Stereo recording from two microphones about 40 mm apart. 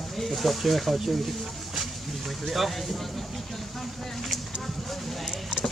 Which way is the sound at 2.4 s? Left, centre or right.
Centre.